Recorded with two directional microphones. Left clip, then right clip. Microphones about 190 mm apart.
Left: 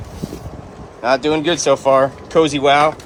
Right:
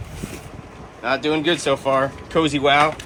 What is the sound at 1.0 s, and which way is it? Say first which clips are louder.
Speech: left 5 dB; 25° left (ahead or behind).